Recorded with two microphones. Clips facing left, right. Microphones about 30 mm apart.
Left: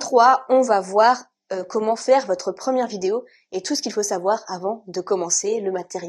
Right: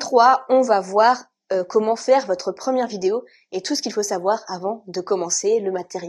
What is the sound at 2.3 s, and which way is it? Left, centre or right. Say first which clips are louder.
Speech: even; centre.